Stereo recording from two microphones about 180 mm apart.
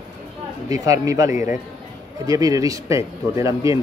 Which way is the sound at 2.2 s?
20° right (ahead or behind).